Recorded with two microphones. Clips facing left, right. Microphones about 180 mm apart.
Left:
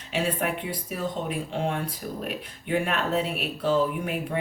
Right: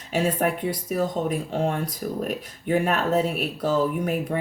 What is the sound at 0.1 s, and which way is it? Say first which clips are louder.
Speech: right 4 dB; 45° right (ahead or behind).